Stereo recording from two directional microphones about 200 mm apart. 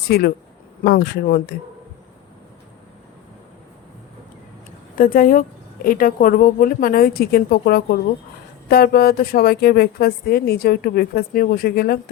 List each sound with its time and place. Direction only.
0.1 s a woman's voice: 50° left (ahead or behind)
4.9 s a woman's voice: 45° left (ahead or behind)